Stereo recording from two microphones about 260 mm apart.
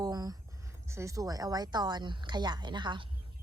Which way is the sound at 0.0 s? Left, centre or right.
Centre.